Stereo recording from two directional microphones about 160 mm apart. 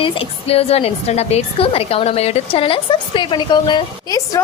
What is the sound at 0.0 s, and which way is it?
A woman's voice, 40° left (ahead or behind).